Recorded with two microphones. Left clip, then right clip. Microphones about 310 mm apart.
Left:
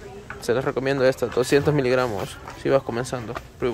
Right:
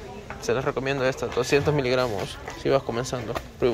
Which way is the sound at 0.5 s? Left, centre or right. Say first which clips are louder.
Left 3 dB; centre.